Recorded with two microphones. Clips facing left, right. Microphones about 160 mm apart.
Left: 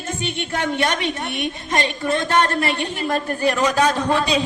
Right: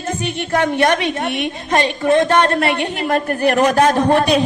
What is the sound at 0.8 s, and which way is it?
Speech, 60° right (ahead or behind).